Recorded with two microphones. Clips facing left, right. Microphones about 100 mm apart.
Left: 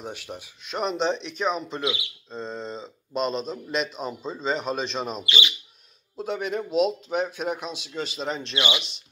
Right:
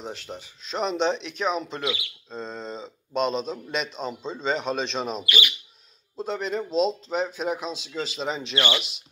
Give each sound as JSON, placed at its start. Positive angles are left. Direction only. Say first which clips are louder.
{"t": 0.3, "sound": "speech", "louder": "even", "side_deg": 5}
{"t": 1.8, "sound": "speech", "louder": "left 1 dB", "side_deg": 25}
{"t": 2.3, "sound": "speech", "louder": "left 1 dB", "side_deg": 0}
{"t": 5.2, "sound": "speech", "louder": "even", "side_deg": 25}
{"t": 6.1, "sound": "speech", "louder": "even", "side_deg": 5}
{"t": 8.5, "sound": "speech", "louder": "right 2 dB", "side_deg": 15}